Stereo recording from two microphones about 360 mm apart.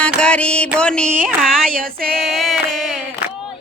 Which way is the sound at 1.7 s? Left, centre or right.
Right.